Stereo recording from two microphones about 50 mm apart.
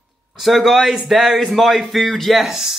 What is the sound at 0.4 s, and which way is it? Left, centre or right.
Speech, centre.